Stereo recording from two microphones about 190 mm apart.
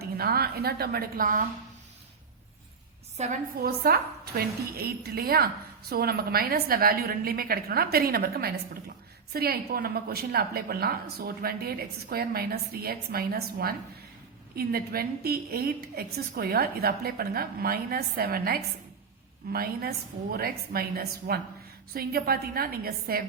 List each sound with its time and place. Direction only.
0.0 s a woman's voice: 55° right (ahead or behind)
3.2 s a woman's voice: 50° right (ahead or behind)